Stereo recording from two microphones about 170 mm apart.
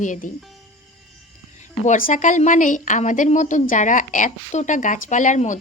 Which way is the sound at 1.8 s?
50° left (ahead or behind).